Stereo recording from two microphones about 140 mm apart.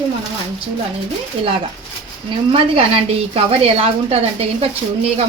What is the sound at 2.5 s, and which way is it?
A woman's voice, 40° right (ahead or behind).